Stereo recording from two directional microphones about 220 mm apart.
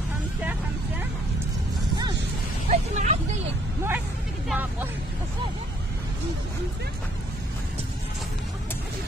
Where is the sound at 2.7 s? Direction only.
30° right (ahead or behind).